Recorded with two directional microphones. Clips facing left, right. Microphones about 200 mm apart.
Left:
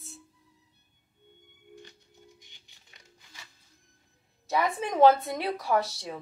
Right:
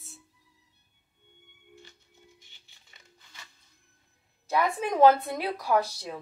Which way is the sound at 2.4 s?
15° left (ahead or behind).